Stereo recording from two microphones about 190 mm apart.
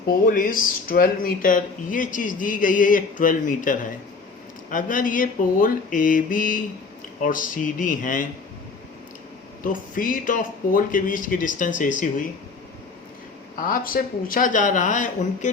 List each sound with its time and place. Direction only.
0.3 s speech: 45° left (ahead or behind)
9.6 s speech: 45° left (ahead or behind)
13.6 s speech: 50° left (ahead or behind)